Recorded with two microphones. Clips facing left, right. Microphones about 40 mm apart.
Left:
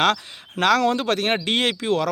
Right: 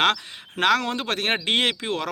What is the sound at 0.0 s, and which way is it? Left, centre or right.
A man's voice, right.